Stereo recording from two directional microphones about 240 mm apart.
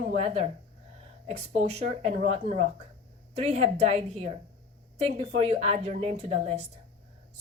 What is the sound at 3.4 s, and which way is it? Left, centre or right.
Speech, right.